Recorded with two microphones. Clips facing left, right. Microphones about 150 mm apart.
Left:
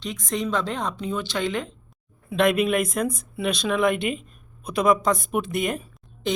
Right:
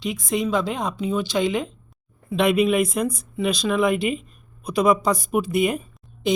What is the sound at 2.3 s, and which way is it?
Speech, centre (ahead or behind).